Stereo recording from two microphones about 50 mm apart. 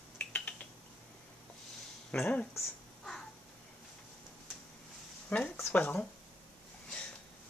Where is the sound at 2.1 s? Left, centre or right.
Left.